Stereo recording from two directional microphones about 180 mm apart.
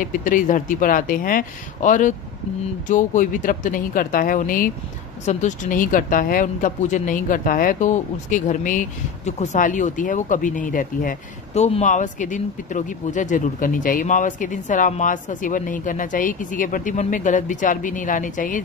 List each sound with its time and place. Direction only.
0.0 s speech: 50° left (ahead or behind)